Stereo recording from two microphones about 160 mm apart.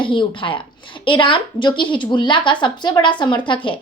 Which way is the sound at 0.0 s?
30° left (ahead or behind).